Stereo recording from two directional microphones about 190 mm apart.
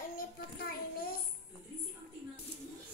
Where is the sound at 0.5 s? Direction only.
50° left (ahead or behind).